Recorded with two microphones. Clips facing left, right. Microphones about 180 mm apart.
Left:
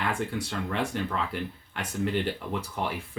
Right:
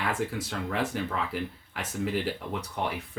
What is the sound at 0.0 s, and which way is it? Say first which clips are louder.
Speech: even; centre (ahead or behind).